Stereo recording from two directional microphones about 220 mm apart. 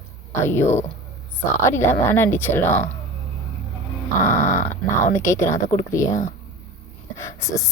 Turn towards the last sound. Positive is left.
turn(degrees=15)  # may be behind; listen again after turning